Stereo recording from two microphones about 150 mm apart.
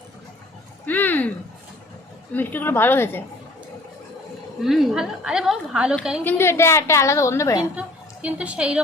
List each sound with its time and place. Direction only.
0.9 s a sound: 10° left (ahead or behind)
2.3 s a woman's voice: 10° left (ahead or behind)
4.6 s a woman's voice: 5° right (ahead or behind)
6.2 s a woman's voice: 15° left (ahead or behind)
7.8 s a woman's voice: 10° right (ahead or behind)